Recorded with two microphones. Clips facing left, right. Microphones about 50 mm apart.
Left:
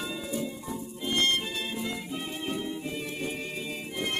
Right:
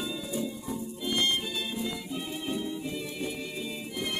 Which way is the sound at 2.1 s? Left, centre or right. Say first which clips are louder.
Even; left.